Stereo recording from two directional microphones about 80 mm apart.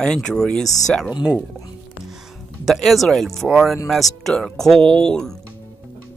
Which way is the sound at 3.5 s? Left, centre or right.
Centre.